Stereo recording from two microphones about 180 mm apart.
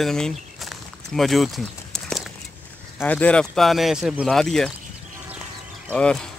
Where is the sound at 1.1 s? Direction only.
Centre (ahead or behind).